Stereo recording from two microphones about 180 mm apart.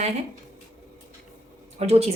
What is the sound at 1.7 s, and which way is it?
Speech, 35° right (ahead or behind).